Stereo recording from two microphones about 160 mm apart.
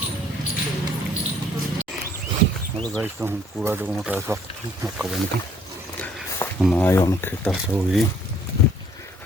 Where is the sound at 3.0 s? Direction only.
10° right (ahead or behind).